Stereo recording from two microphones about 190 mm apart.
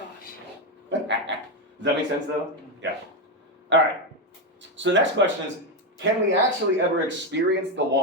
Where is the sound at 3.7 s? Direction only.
70° right (ahead or behind).